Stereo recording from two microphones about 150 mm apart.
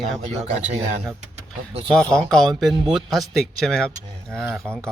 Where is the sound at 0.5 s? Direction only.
55° right (ahead or behind).